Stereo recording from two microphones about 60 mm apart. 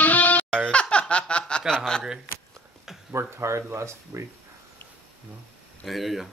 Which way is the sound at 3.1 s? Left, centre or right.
Right.